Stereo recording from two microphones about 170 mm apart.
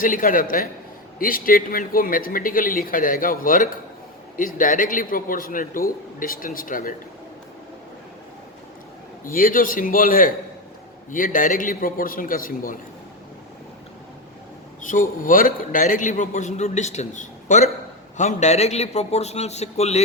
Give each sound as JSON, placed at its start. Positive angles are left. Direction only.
{"t": 0.0, "sound": "a man's voice", "side_deg": 55}
{"t": 9.2, "sound": "speech", "side_deg": 55}
{"t": 14.8, "sound": "a man's voice", "side_deg": 50}